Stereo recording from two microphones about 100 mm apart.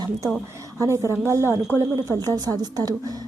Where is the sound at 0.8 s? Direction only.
30° right (ahead or behind).